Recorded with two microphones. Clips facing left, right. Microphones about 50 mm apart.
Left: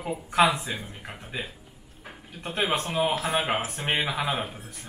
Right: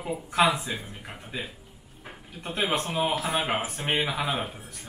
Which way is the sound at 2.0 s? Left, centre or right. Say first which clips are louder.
Left 1 dB; centre.